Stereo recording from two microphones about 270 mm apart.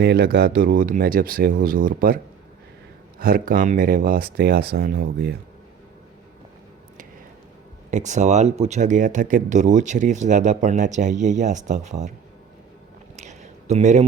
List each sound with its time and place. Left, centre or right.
0.0 s speech: right
7.9 s speech: right
13.1 s a sound: right